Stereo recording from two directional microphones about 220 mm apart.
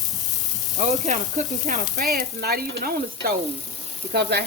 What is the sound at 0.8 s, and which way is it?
Sizzle, 30° right (ahead or behind).